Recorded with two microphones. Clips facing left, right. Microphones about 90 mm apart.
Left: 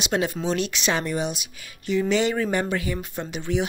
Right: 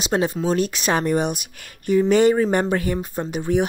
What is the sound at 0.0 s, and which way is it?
Speech, 35° right (ahead or behind).